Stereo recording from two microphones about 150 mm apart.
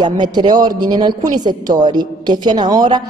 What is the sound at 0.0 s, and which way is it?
A woman's voice, 30° right (ahead or behind).